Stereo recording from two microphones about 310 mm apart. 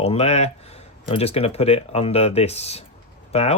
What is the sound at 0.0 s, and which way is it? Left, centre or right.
Speech, centre.